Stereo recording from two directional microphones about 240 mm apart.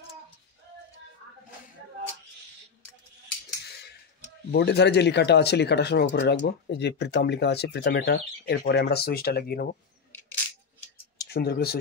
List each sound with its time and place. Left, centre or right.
4.5 s speech: left
11.1 s speech: left